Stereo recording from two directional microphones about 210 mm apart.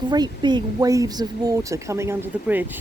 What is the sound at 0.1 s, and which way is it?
Speech, 20° right (ahead or behind).